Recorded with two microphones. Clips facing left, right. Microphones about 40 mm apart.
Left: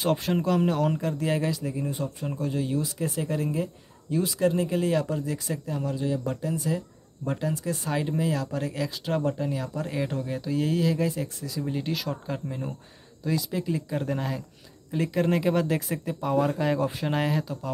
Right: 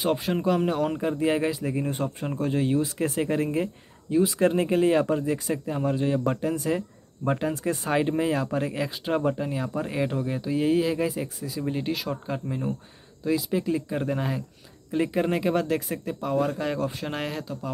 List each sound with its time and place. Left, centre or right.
0.0 s speech: centre; by 1.6 s right
1.6 s speech: right
4.1 s speech: centre
4.4 s speech: right; by 17.6 s centre